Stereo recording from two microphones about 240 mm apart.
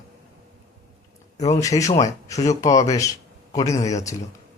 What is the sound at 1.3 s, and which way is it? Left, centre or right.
Speech, left.